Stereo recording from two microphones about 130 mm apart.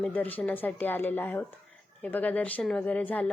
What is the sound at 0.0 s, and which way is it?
Speech, 15° left (ahead or behind).